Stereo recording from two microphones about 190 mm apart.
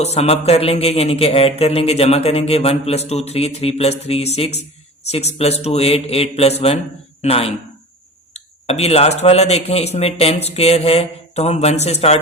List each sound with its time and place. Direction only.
0.0 s speech: 35° left (ahead or behind)